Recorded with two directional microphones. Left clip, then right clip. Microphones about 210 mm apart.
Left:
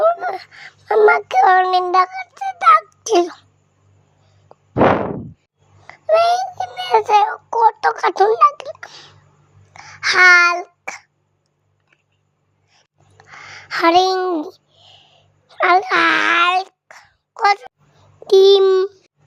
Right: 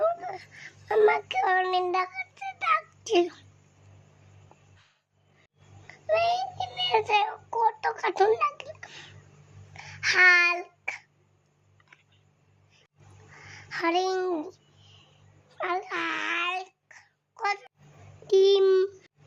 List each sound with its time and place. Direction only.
0.0 s child singing: 35° left (ahead or behind)
5.9 s child singing: 35° left (ahead or behind)
9.7 s a sound: 30° left (ahead or behind)
13.3 s a sound: 35° left (ahead or behind)
15.5 s wail: 40° left (ahead or behind)
18.3 s babbling: 35° left (ahead or behind)